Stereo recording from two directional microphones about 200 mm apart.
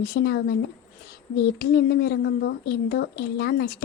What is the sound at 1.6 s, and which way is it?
A woman's voice, 50° left (ahead or behind).